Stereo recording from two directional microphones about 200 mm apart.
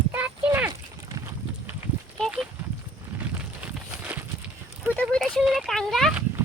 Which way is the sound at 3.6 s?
5° right (ahead or behind).